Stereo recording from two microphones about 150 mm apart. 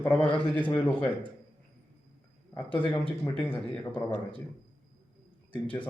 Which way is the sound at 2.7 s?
35° left (ahead or behind).